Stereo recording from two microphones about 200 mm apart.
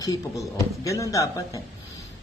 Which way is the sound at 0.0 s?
15° left (ahead or behind).